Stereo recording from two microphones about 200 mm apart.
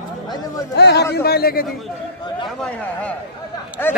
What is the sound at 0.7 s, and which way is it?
Speech, 55° left (ahead or behind).